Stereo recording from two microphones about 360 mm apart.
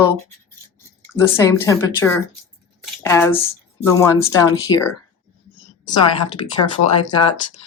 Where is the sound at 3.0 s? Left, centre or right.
Centre.